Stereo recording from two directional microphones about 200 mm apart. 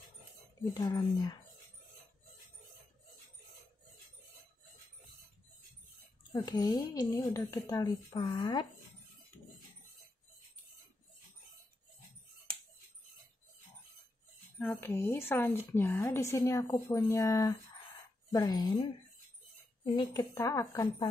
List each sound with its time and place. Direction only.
0.7 s a woman's voice: 20° left (ahead or behind)
6.3 s a woman's voice: 20° left (ahead or behind)
14.6 s a woman's voice: 10° left (ahead or behind)
19.8 s a woman's voice: 20° left (ahead or behind)